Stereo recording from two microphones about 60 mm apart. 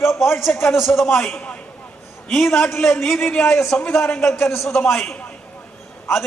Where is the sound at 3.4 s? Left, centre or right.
Left.